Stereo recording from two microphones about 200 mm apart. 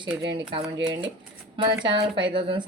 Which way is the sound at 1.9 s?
25° right (ahead or behind).